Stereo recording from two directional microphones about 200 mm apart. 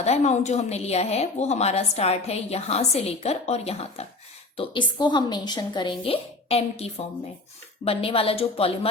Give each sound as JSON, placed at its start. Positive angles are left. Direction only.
{"t": 0.0, "sound": "a woman's voice", "side_deg": 35}